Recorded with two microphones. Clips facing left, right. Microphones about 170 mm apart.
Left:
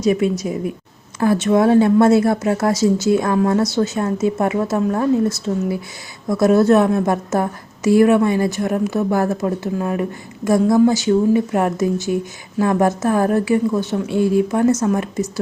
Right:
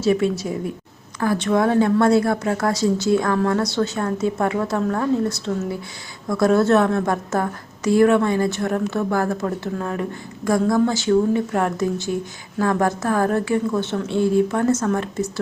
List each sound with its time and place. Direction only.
0.0 s a woman's voice: 15° left (ahead or behind)